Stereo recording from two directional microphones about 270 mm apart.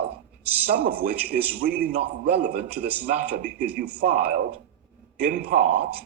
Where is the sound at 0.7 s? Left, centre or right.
Right.